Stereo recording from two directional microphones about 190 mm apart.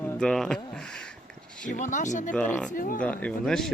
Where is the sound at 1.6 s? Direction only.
40° left (ahead or behind).